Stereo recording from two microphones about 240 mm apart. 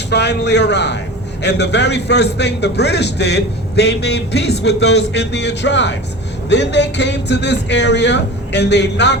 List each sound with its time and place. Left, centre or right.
0.1 s a man's voice: left